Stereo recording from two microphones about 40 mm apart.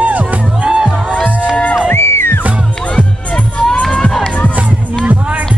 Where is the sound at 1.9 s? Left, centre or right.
Left.